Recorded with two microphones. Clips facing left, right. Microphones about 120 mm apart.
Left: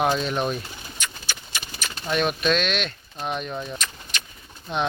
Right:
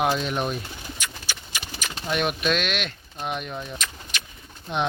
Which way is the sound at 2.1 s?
10° right (ahead or behind).